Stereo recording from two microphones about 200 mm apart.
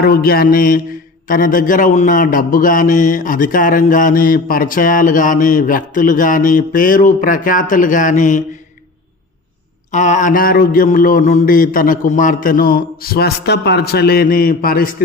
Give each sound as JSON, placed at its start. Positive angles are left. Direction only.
{"t": 0.0, "sound": "mantra", "side_deg": 50}
{"t": 1.3, "sound": "a man's voice", "side_deg": 45}
{"t": 9.9, "sound": "mantra", "side_deg": 40}